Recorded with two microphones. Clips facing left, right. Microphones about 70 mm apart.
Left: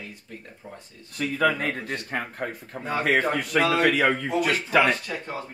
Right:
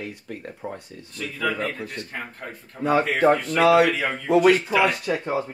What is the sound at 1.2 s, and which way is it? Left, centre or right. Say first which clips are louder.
Speech: left 3 dB; left.